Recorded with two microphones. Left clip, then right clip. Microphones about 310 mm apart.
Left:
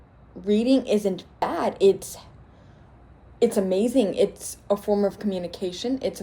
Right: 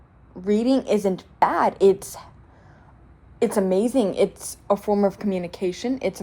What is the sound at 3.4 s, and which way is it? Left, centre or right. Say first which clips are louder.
A woman's voice: right 1 dB; right.